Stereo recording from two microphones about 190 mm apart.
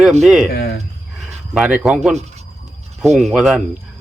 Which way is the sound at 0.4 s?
55° left (ahead or behind).